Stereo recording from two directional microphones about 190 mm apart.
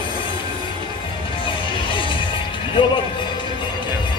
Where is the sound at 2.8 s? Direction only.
25° left (ahead or behind).